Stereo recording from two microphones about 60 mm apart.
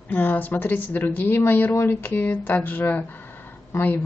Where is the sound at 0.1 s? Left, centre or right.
Left.